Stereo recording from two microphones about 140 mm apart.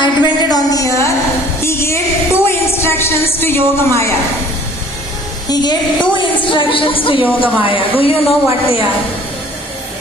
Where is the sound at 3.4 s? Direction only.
20° left (ahead or behind).